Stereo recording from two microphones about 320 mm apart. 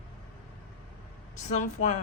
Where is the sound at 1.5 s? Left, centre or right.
Left.